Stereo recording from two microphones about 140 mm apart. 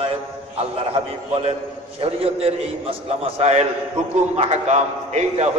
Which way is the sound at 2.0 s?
45° right (ahead or behind).